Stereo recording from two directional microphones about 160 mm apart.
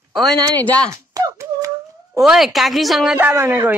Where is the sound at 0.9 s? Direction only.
20° right (ahead or behind).